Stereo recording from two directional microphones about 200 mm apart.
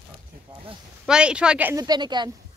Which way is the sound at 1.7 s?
20° right (ahead or behind).